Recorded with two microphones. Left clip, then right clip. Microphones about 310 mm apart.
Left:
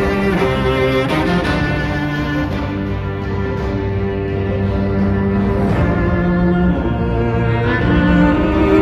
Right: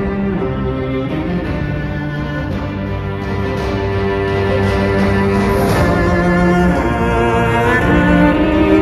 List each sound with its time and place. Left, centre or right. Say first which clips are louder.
4.9 s music: right 4 dB; right
7.2 s music: right 6 dB; right; by 8.7 s centre